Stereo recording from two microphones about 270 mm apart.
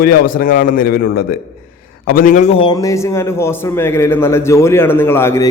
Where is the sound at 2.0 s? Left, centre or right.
Left.